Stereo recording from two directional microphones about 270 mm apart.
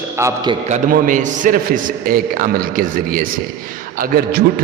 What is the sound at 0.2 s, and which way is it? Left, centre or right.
Speech, centre.